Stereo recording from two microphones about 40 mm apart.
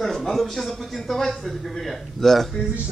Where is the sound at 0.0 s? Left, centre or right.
Centre.